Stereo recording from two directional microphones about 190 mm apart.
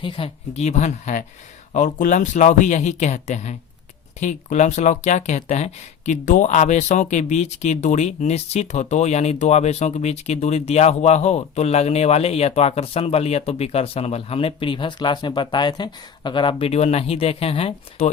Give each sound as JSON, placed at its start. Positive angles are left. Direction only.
{"t": 0.0, "sound": "speech", "side_deg": 30}